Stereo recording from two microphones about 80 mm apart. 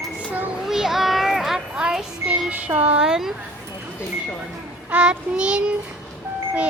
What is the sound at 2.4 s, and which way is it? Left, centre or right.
Speech, centre.